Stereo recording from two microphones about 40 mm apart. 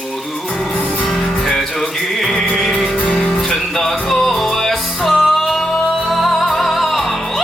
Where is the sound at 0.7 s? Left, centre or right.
Left.